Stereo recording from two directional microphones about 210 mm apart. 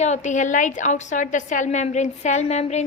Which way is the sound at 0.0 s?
35° left (ahead or behind).